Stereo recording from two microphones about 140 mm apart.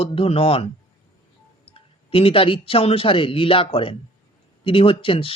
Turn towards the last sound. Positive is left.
turn(degrees=40)  # may be behind; listen again after turning